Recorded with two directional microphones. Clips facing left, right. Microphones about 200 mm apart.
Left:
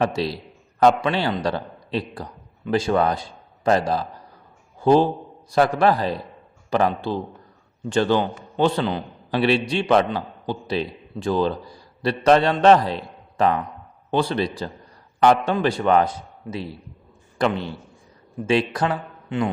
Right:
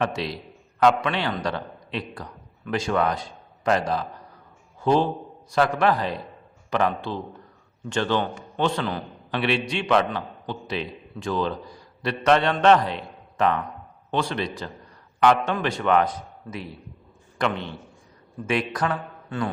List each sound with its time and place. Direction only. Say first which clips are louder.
0.0 s a man's voice: left 4 dB; 35° left (ahead or behind)